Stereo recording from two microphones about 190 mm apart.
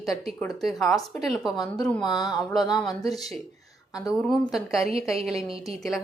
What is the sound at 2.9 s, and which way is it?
Speech, 20° left (ahead or behind).